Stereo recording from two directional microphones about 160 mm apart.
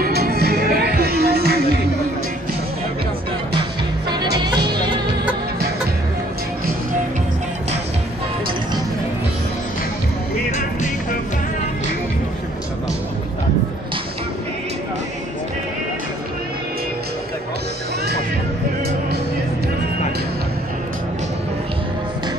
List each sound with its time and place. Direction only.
0.0 s music: 80° right
4.1 s music: 25° right (ahead or behind)
10.5 s music: 50° left (ahead or behind)